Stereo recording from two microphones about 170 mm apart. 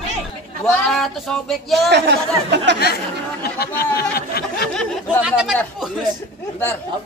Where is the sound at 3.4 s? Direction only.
65° left (ahead or behind).